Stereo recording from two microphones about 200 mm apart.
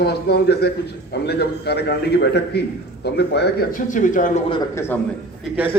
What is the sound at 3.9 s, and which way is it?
Speech, 40° left (ahead or behind).